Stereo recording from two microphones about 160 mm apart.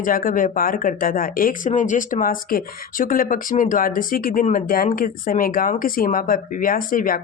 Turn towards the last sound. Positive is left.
turn(degrees=60)  # may be behind; listen again after turning